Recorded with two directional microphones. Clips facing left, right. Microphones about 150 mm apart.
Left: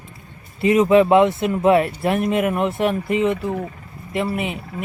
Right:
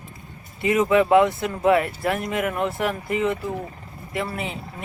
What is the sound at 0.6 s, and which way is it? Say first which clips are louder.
Speech: left 5 dB; 30° left (ahead or behind).